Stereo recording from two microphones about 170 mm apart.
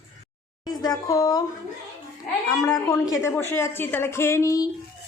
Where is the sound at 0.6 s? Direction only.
25° left (ahead or behind).